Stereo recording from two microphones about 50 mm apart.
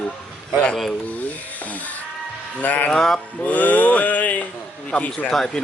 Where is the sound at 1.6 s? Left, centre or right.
Left.